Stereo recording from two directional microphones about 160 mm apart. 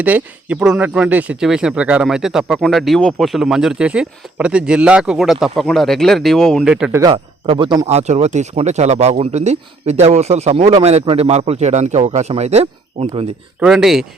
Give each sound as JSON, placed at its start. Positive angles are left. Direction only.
{"t": 0.0, "sound": "speech", "side_deg": -10}
{"t": 7.4, "sound": "speech", "side_deg": -35}
{"t": 7.9, "sound": "a man's voice", "side_deg": -45}
{"t": 13.6, "sound": "speech", "side_deg": -5}